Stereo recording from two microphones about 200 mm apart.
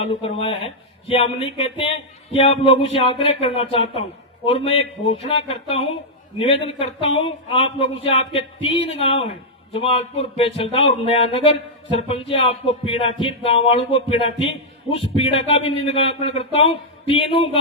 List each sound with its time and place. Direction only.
0.0 s speech: 30° left (ahead or behind)
5.1 s music: 30° left (ahead or behind)
6.7 s speech: 25° left (ahead or behind)